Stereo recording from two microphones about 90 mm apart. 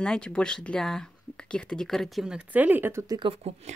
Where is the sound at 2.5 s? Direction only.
20° right (ahead or behind).